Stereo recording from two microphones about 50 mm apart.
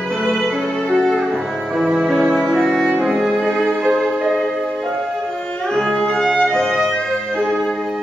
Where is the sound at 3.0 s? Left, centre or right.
Centre.